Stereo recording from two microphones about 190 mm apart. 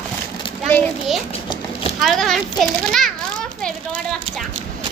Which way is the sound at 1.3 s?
25° left (ahead or behind).